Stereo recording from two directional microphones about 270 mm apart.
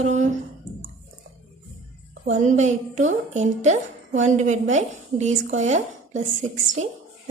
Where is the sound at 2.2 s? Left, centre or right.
Right.